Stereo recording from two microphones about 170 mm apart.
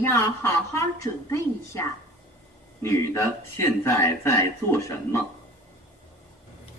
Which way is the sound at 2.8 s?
15° left (ahead or behind).